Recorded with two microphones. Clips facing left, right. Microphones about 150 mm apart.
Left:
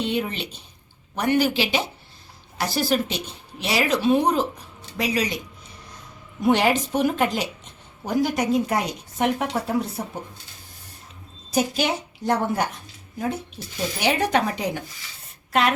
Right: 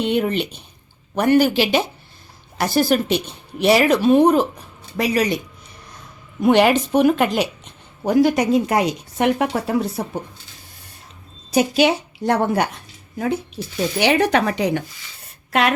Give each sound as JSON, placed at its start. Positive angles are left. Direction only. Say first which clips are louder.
{"t": 0.0, "sound": "speech", "louder": "right 6 dB", "side_deg": -60}
{"t": 6.4, "sound": "a woman's voice", "louder": "right 5 dB", "side_deg": -70}
{"t": 11.5, "sound": "a woman's voice", "louder": "right 6 dB", "side_deg": -75}